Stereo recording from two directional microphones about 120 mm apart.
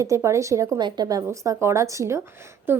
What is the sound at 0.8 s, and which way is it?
A woman's voice, 35° right (ahead or behind).